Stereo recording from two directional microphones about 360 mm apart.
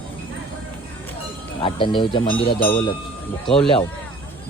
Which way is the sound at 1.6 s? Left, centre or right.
Centre.